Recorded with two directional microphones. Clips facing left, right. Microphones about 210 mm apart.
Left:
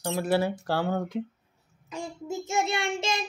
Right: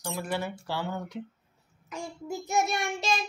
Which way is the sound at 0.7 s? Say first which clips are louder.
Left 6 dB; 90° left.